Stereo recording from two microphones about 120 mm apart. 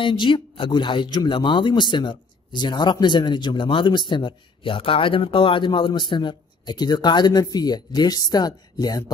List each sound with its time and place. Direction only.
0.0 s speech: 45° left (ahead or behind)